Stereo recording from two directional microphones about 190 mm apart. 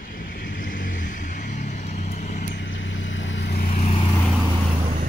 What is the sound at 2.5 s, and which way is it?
Vehicle, 70° left (ahead or behind).